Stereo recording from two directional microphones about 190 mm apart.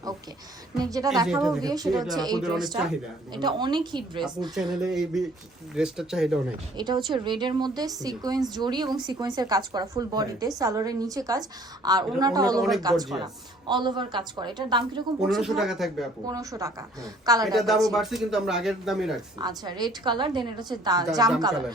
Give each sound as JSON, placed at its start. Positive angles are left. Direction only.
{"t": 0.8, "sound": "a woman's voice", "side_deg": -20}
{"t": 1.3, "sound": "speech", "side_deg": 0}
{"t": 1.6, "sound": "a woman's voice", "side_deg": -20}
{"t": 2.0, "sound": "speech", "side_deg": 0}
{"t": 3.3, "sound": "a woman's voice", "side_deg": -25}
{"t": 4.5, "sound": "speech", "side_deg": 0}
{"t": 6.7, "sound": "a woman's voice", "side_deg": -25}
{"t": 15.2, "sound": "speech", "side_deg": -5}
{"t": 16.2, "sound": "a woman's voice", "side_deg": -20}
{"t": 17.5, "sound": "speech", "side_deg": 0}
{"t": 19.4, "sound": "a woman's voice", "side_deg": -20}